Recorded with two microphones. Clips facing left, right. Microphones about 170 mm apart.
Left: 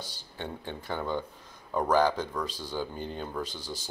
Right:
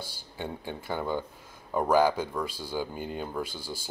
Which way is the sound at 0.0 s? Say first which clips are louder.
Right 2 dB; 10° right (ahead or behind).